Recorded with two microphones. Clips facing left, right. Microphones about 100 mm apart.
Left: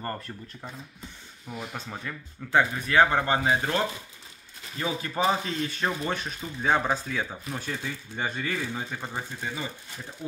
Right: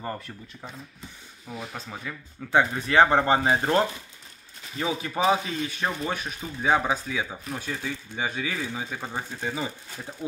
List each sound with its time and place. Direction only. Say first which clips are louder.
0.0 s speech: even; 5° right (ahead or behind)
2.5 s speech: right 1 dB; 25° right (ahead or behind)
4.7 s speech: right 1 dB; 15° right (ahead or behind)